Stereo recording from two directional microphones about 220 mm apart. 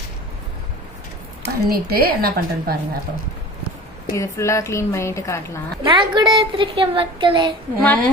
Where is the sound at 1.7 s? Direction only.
45° right (ahead or behind).